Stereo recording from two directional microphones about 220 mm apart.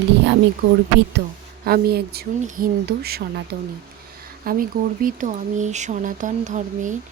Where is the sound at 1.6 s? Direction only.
45° right (ahead or behind).